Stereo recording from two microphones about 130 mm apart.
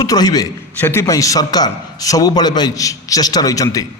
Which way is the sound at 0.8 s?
20° left (ahead or behind).